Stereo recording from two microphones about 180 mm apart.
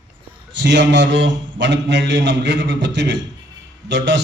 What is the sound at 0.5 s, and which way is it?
A man's voice, 80° right.